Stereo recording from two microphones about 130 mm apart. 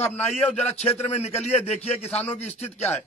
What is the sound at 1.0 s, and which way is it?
A man's voice, 55° left (ahead or behind).